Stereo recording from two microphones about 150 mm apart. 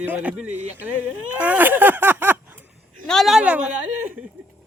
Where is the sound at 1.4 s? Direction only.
10° right (ahead or behind).